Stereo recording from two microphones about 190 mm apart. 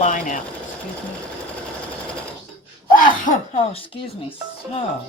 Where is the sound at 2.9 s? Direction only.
45° left (ahead or behind).